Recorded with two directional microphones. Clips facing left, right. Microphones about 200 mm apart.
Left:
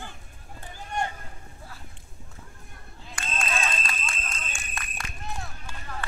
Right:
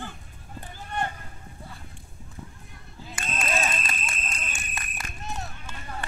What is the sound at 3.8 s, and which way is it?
Clip-clop, 20° right (ahead or behind).